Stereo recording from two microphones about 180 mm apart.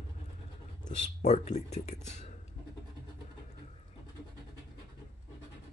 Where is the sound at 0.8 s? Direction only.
40° left (ahead or behind).